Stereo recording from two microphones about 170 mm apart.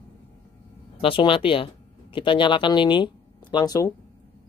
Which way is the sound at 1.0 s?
30° left (ahead or behind).